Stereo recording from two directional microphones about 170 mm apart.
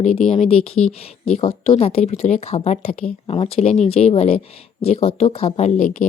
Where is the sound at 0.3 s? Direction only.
35° left (ahead or behind).